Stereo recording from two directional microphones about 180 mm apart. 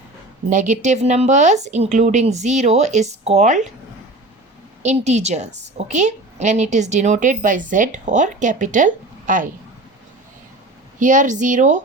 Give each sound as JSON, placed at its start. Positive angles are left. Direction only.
{"t": 0.5, "sound": "speech", "side_deg": -45}
{"t": 4.8, "sound": "a woman's voice", "side_deg": -40}
{"t": 11.0, "sound": "a woman's voice", "side_deg": -45}